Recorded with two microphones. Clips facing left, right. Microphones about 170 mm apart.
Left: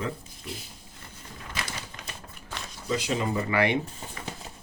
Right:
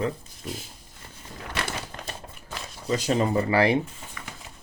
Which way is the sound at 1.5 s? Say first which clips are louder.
Right 5 dB; 65° right (ahead or behind).